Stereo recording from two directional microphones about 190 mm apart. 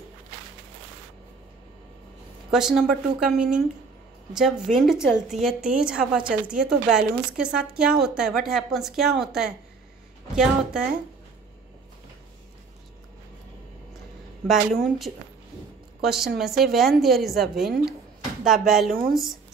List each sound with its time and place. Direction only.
2.5 s a woman's voice: centre (ahead or behind)
14.5 s a woman's voice: centre (ahead or behind)
18.9 s speech: 50° right (ahead or behind)